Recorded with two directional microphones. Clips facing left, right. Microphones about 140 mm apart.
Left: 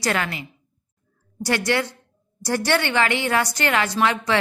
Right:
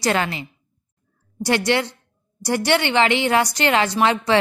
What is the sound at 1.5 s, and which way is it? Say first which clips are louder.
A woman's voice: right 3 dB; 25° right (ahead or behind).